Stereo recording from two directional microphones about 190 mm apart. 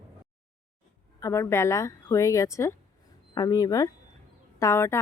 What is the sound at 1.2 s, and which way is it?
Speech, 15° left (ahead or behind).